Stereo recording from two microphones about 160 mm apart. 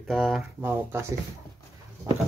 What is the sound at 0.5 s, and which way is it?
Speech, 15° right (ahead or behind).